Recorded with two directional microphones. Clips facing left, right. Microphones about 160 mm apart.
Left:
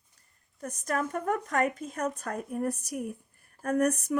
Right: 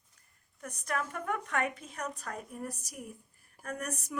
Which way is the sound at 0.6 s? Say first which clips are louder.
Left 5 dB; 40° left (ahead or behind).